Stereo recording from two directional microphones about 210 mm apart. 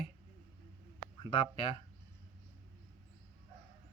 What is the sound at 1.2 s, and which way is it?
Speech, 25° left (ahead or behind).